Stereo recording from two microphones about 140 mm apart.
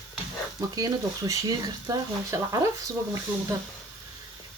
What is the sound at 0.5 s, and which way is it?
Speech, 25° right (ahead or behind).